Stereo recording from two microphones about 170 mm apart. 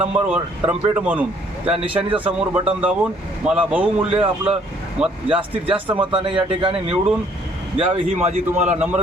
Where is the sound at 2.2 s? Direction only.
10° right (ahead or behind).